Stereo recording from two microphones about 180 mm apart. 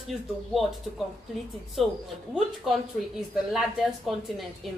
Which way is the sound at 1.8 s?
Centre (ahead or behind).